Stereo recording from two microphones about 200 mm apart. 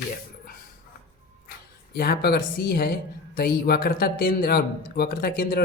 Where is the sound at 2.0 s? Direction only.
50° left (ahead or behind).